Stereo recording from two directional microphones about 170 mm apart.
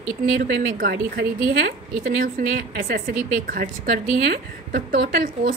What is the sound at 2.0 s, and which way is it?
Speech, 60° right (ahead or behind).